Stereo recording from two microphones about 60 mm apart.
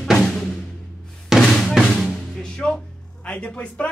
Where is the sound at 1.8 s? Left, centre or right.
Centre.